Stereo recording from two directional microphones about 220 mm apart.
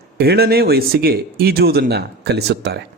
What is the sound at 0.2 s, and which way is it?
Speech, 45° right (ahead or behind).